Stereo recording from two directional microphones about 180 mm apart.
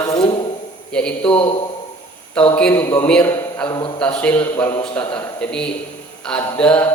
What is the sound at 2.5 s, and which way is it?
A man's voice, 10° left (ahead or behind).